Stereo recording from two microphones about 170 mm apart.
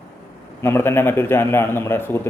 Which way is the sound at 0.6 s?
15° left (ahead or behind).